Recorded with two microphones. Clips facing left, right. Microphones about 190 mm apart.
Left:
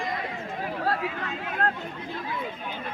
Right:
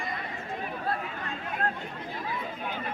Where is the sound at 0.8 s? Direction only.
90° left.